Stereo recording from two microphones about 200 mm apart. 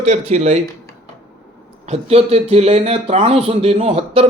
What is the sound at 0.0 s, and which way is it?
Speech, 35° right (ahead or behind).